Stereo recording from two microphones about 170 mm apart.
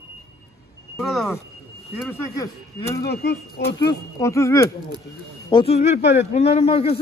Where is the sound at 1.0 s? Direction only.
Centre (ahead or behind).